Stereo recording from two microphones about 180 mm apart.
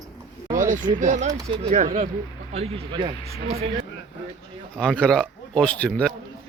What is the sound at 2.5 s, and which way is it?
Speech, 35° right (ahead or behind).